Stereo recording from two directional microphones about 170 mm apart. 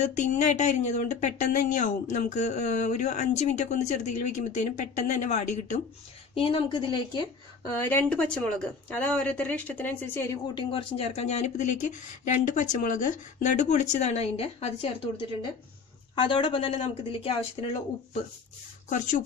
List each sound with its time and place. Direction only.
0.0 s speech: 45° left (ahead or behind)
6.3 s speech: 35° left (ahead or behind)
7.7 s speech: 10° left (ahead or behind)
10.5 s speech: 30° left (ahead or behind)
16.1 s speech: 30° left (ahead or behind)
18.9 s speech: 50° left (ahead or behind)